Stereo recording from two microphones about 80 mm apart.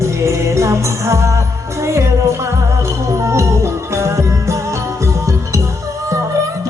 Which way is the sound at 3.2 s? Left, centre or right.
Right.